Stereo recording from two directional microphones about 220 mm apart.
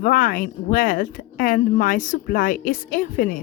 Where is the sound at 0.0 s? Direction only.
40° left (ahead or behind).